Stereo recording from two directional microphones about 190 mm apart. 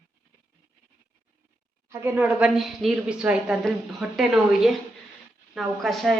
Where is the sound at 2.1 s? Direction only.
5° right (ahead or behind).